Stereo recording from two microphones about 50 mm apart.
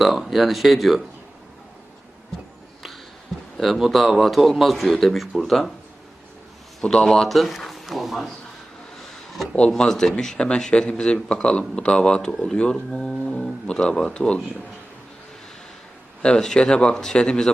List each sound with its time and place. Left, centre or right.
0.0 s speech: centre
3.6 s speech: centre
6.8 s speech: centre
7.3 s speech: centre
9.6 s speech: centre
16.2 s speech: centre